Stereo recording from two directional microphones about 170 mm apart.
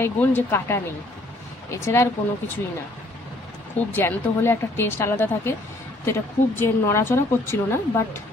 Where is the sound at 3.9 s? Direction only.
10° left (ahead or behind).